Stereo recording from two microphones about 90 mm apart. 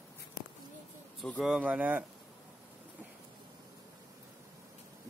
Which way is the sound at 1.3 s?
5° right (ahead or behind).